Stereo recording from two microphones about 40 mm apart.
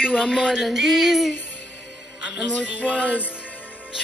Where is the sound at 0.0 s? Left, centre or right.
Centre.